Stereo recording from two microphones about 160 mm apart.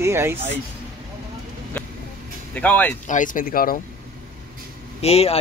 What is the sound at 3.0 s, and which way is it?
Speech, 55° left (ahead or behind).